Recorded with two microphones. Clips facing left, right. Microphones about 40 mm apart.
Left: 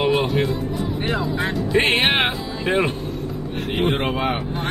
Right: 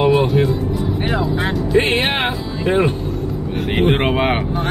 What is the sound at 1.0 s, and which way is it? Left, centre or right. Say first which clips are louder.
Vehicle: right 3 dB; centre.